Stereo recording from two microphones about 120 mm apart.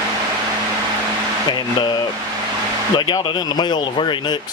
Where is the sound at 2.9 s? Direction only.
40° left (ahead or behind).